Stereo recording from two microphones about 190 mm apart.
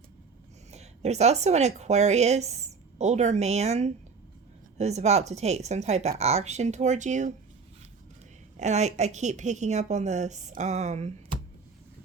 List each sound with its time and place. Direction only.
0.7 s a woman's voice: 35° right (ahead or behind)
8.5 s a woman's voice: 35° right (ahead or behind)